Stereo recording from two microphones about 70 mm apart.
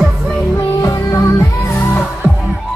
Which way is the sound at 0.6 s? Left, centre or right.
Left.